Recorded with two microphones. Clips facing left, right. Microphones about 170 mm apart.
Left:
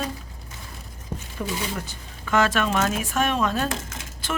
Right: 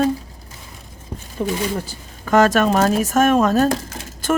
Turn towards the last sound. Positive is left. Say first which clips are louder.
# right 10 dB
turn(degrees=-45)  # may be behind; listen again after turning